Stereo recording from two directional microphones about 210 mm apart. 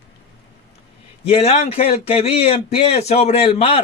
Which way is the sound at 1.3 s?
30° left (ahead or behind).